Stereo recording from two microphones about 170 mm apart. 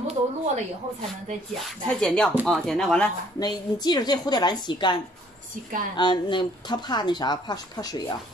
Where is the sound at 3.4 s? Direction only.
25° left (ahead or behind).